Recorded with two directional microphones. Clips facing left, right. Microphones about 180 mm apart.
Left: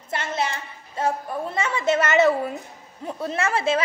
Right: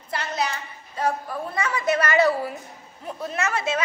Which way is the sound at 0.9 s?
25° left (ahead or behind).